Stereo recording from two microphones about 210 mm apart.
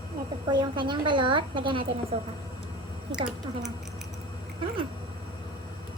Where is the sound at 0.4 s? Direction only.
20° right (ahead or behind).